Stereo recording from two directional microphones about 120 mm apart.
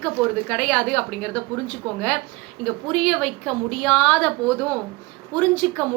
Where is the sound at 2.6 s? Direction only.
5° left (ahead or behind).